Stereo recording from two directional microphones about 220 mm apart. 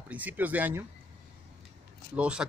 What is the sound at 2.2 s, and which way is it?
Speech, 5° right (ahead or behind).